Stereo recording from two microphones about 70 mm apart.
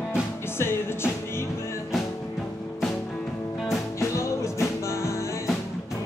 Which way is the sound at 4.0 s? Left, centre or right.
Left.